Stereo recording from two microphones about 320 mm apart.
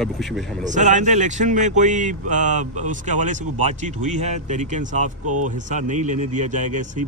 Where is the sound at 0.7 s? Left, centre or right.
Right.